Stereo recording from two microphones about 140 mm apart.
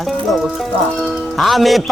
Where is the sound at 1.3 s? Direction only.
Centre (ahead or behind).